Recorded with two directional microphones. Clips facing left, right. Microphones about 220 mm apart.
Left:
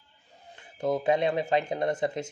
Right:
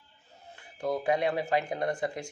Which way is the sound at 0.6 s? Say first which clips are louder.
Left 3 dB; 20° left (ahead or behind).